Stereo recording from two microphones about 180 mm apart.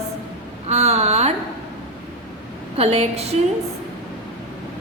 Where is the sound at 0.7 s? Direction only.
35° right (ahead or behind).